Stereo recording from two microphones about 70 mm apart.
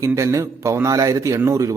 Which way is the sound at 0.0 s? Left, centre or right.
Right.